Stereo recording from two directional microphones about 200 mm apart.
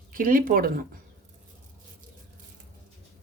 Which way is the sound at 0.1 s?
45° right (ahead or behind).